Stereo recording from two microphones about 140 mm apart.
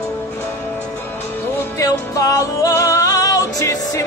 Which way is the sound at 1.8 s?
25° left (ahead or behind).